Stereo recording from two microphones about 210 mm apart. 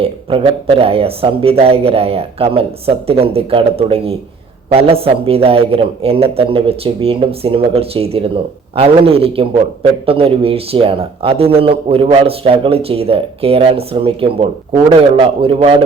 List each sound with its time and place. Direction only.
0.0 s a man's voice: 25° right (ahead or behind)